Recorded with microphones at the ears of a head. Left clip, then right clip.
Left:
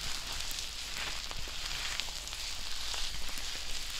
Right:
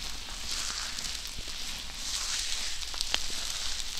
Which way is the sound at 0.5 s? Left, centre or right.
Right.